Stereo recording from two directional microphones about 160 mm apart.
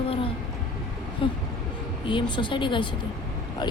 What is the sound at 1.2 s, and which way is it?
A woman's voice, 35° left (ahead or behind).